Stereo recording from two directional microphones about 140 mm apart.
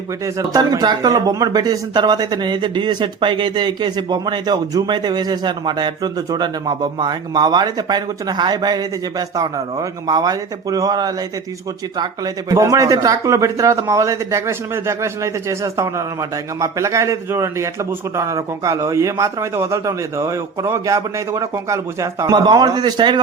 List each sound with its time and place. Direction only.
0.3 s speech: 25° right (ahead or behind)